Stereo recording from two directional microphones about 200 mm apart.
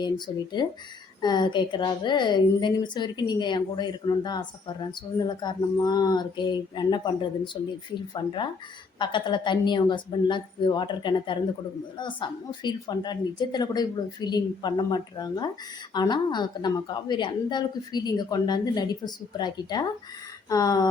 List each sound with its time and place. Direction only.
0.3 s a woman's voice: 20° left (ahead or behind)